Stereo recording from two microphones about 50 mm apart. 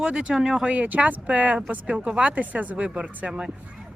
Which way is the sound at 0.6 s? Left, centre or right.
Right.